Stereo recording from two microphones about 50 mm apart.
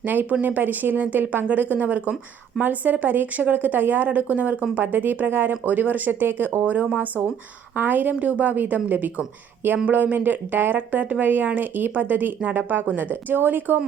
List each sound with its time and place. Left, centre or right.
0.0 s speech: right